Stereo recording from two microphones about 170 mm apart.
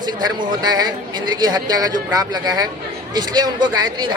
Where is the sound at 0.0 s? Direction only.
25° right (ahead or behind).